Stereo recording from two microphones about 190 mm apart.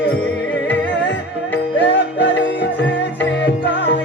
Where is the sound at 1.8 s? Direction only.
65° left (ahead or behind).